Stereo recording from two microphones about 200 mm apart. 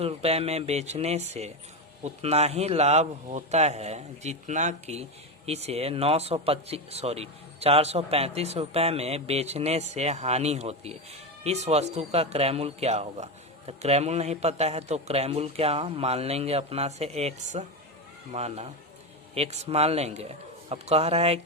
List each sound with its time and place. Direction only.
0.0 s speech: 30° right (ahead or behind)